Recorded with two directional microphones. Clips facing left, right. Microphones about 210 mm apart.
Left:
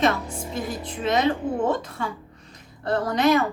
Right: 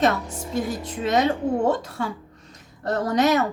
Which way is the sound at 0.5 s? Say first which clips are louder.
Right 5 dB; 45° right (ahead or behind).